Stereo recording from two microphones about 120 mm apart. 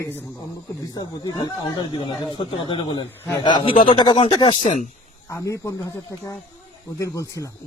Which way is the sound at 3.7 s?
50° left (ahead or behind).